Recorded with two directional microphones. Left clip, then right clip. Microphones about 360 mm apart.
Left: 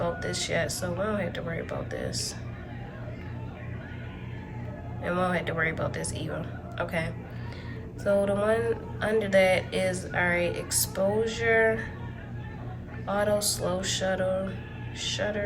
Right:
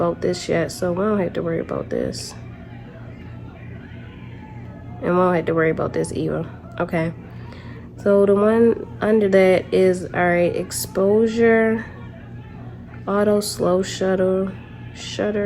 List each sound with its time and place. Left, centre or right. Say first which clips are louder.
0.0 s speech: right 9 dB; centre
5.0 s speech: right 10 dB; centre
13.1 s speech: right 7 dB; centre